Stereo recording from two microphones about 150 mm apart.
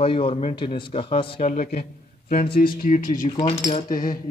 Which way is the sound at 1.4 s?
55° left (ahead or behind).